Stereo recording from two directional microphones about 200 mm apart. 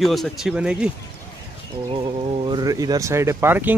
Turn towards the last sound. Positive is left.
turn(degrees=-10)  # may be behind; listen again after turning